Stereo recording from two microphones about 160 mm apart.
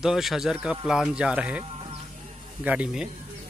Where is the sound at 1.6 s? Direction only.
35° right (ahead or behind).